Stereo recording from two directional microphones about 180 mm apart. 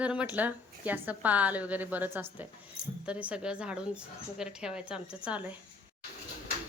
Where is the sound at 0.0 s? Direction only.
5° right (ahead or behind).